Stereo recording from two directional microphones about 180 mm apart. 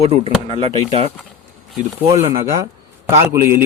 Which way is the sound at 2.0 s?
15° right (ahead or behind).